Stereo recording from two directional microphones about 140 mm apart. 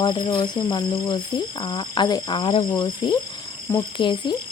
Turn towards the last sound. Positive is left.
turn(degrees=35)  # may be behind; listen again after turning